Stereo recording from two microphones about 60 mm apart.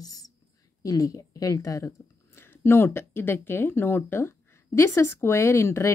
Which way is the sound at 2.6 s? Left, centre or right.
Left.